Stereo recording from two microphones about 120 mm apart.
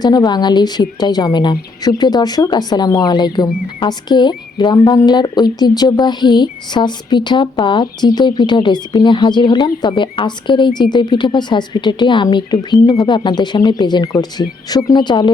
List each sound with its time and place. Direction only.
0.0 s speech: 35° left (ahead or behind)